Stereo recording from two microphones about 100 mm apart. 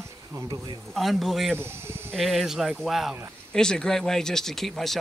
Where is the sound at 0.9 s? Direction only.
Centre (ahead or behind).